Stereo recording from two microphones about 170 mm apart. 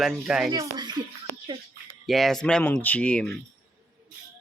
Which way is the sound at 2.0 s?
Centre (ahead or behind).